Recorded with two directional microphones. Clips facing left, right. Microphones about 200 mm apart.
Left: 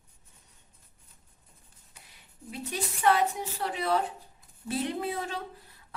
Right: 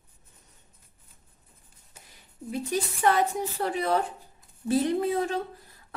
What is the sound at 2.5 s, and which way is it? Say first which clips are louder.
A woman's voice: right 6 dB; 45° right (ahead or behind).